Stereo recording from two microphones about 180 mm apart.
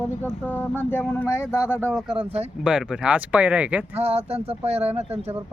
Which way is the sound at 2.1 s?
30° right (ahead or behind).